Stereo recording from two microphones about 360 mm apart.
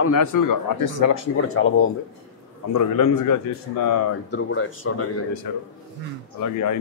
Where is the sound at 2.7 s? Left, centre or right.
Left.